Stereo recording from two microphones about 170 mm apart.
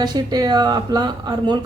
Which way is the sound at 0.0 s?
25° right (ahead or behind).